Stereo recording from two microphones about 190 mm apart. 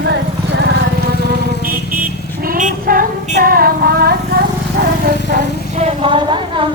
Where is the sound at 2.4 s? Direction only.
45° right (ahead or behind).